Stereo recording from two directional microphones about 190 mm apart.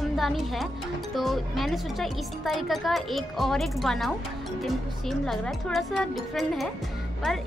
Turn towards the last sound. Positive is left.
turn(degrees=0)  # may be behind; listen again after turning